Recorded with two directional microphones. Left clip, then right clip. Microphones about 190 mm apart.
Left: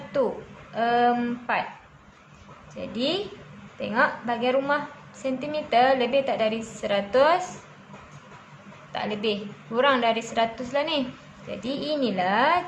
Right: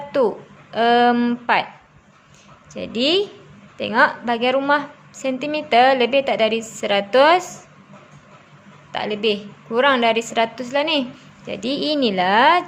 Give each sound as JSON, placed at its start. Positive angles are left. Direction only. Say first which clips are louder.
{"t": 0.1, "sound": "a woman's voice", "louder": "right 6 dB", "side_deg": -45}
{"t": 2.7, "sound": "a woman's voice", "louder": "right 8 dB", "side_deg": -50}
{"t": 8.9, "sound": "a woman's voice", "louder": "right 6 dB", "side_deg": -45}